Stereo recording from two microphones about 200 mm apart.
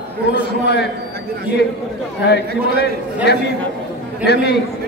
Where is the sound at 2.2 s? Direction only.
55° left (ahead or behind).